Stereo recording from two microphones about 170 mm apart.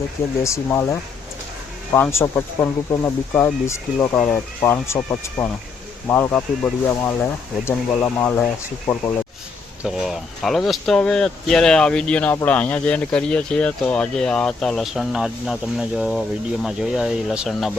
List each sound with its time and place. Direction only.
0.4 s speech: 15° left (ahead or behind); by 17.7 s centre (ahead or behind)